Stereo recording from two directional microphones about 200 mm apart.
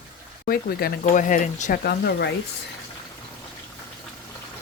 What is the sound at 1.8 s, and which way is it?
Speech, 55° left (ahead or behind).